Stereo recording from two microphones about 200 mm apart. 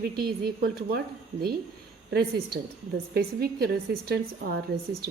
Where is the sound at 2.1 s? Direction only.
50° right (ahead or behind).